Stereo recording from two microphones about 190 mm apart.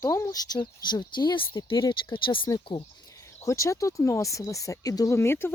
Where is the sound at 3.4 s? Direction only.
15° left (ahead or behind).